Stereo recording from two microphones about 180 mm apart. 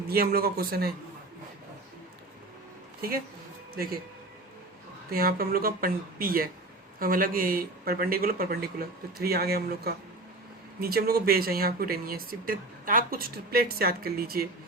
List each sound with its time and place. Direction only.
0.1 s speech: 55° right (ahead or behind)
5.1 s speech: 55° right (ahead or behind)